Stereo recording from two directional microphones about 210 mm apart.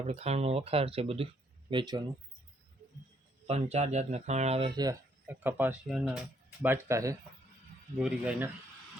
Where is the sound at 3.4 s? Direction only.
30° right (ahead or behind); by 6.2 s centre (ahead or behind).